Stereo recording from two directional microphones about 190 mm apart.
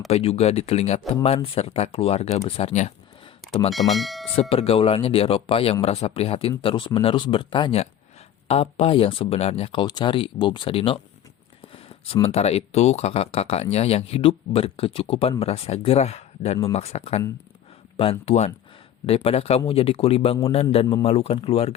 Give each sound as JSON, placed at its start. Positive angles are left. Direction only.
{"t": 0.1, "sound": "speech", "side_deg": 30}
{"t": 3.7, "sound": "speech", "side_deg": 0}
{"t": 4.4, "sound": "speech", "side_deg": 30}